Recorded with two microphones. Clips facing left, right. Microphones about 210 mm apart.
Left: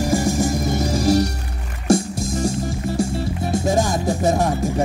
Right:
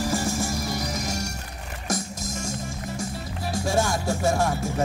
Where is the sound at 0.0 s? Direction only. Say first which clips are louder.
Left 7 dB; 15° left (ahead or behind).